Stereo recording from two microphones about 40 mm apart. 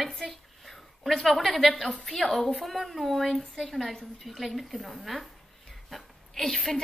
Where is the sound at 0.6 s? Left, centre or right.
Centre.